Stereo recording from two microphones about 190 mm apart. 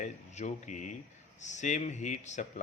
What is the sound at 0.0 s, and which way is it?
Speech, 40° left (ahead or behind).